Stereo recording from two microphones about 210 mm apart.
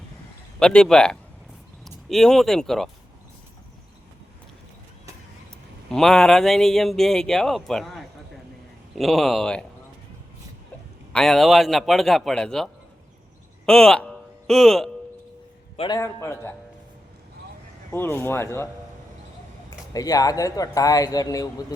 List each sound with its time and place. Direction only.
0.6 s a man's voice: 5° left (ahead or behind)
5.9 s a man's voice: centre (ahead or behind)
11.1 s a man's voice: centre (ahead or behind)
15.8 s speech: 15° left (ahead or behind)
17.9 s speech: 10° left (ahead or behind)
19.9 s speech: 15° left (ahead or behind)